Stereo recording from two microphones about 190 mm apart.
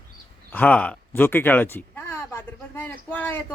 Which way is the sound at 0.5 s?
5° left (ahead or behind).